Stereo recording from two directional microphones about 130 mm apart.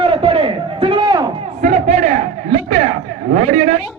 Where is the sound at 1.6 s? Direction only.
80° right; by 3.8 s 55° right (ahead or behind).